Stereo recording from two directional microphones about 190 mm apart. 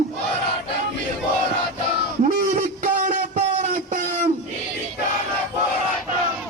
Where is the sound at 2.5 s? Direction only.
45° right (ahead or behind).